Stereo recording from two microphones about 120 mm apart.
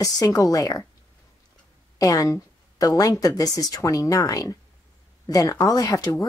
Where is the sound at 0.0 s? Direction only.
30° left (ahead or behind).